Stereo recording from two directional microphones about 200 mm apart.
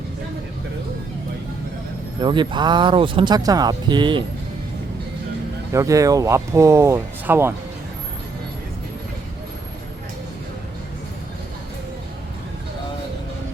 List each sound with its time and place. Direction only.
2.2 s speech: 25° right (ahead or behind)
5.7 s speech: 15° right (ahead or behind)